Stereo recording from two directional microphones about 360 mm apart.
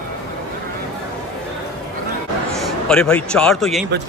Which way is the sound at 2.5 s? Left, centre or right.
Centre.